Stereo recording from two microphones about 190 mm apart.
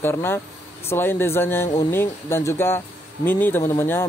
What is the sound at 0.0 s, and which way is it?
Speech, 10° left (ahead or behind).